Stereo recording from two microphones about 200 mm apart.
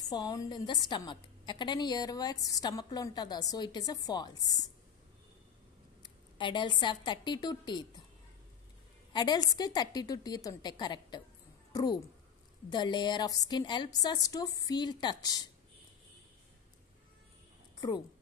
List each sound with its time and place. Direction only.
0.1 s a woman's voice: 20° left (ahead or behind)
6.3 s a woman's voice: 25° left (ahead or behind)
9.1 s a woman's voice: 20° left (ahead or behind)
17.7 s speech: 20° left (ahead or behind)